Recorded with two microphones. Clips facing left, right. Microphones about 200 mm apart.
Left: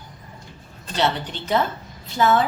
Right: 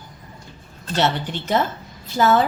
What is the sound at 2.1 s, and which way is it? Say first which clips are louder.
Speech: right 2 dB; 40° right (ahead or behind).